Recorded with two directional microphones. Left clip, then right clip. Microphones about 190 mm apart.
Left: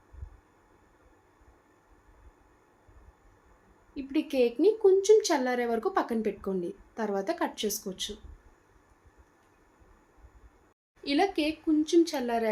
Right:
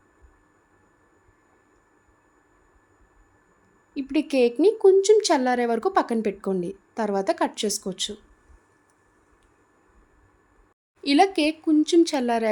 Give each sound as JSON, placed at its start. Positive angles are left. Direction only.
{"t": 3.9, "sound": "speech", "side_deg": -55}
{"t": 11.0, "sound": "speech", "side_deg": -60}